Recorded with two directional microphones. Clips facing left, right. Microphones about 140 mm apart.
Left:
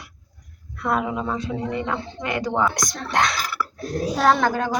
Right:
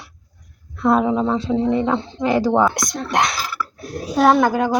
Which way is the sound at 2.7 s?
20° right (ahead or behind).